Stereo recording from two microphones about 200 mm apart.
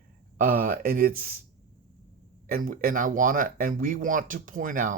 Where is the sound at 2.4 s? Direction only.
45° right (ahead or behind).